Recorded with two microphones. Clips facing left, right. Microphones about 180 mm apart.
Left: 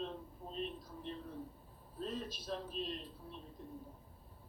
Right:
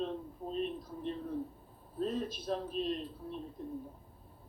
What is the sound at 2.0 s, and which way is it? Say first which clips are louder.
Speech: right 7 dB; 50° right (ahead or behind).